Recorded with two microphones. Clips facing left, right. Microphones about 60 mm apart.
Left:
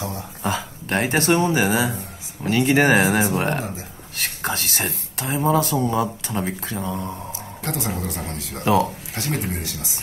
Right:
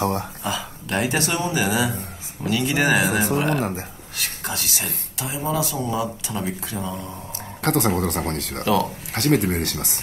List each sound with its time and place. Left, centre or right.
0.0 s speech: right
0.4 s speech: left
7.6 s speech: right
8.6 s speech: left
9.1 s speech: right